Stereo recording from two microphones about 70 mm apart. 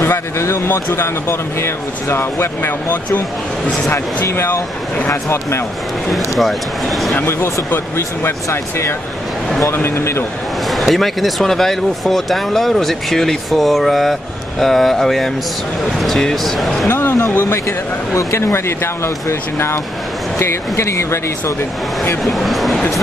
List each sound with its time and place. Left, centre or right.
0.4 s speech: left
4.5 s speech: left
6.1 s speech: centre
7.2 s speech: left
10.7 s speech: centre
16.8 s speech: left
22.2 s speech: centre